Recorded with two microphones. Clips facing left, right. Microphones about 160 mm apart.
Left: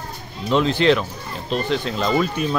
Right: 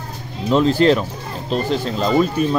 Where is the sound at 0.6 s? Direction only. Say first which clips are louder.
Right 3 dB; 40° right (ahead or behind).